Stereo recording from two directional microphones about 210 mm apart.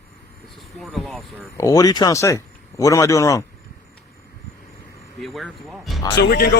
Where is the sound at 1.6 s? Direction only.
15° left (ahead or behind).